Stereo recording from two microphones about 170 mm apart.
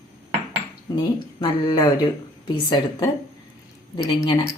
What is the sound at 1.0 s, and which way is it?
Speech, 25° left (ahead or behind).